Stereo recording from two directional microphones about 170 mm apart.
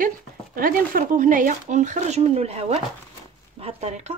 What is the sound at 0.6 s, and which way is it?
Speech, 55° right (ahead or behind).